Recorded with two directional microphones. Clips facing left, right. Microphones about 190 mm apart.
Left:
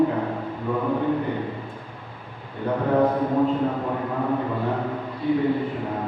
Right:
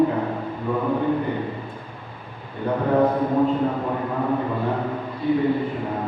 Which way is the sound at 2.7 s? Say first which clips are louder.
Right 1 dB; 20° right (ahead or behind).